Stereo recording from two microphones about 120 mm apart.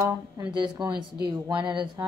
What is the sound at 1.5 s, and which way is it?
Speech, 40° right (ahead or behind).